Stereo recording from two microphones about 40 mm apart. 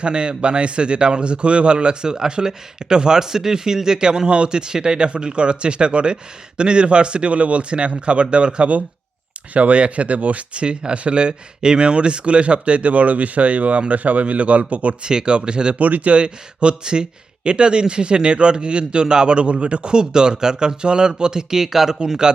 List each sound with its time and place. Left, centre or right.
0.0 s speech: right
15.0 s speech: right
15.8 s speech: right; by 22.3 s centre